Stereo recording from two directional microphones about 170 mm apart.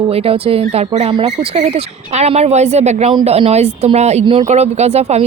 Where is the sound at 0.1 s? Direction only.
35° right (ahead or behind).